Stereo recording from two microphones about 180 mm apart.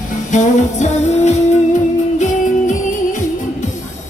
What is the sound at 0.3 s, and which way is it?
Music, 40° left (ahead or behind).